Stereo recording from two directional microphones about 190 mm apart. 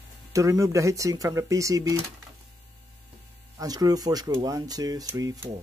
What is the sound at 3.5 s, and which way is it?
Speech, 20° right (ahead or behind).